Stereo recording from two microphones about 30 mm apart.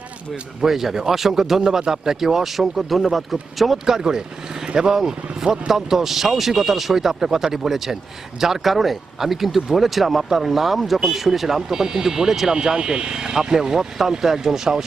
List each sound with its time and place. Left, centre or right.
0.6 s speech: centre
3.8 s a man's voice: centre
12.6 s speech: right